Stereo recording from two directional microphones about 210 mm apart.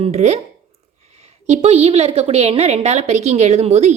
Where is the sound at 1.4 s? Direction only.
30° right (ahead or behind).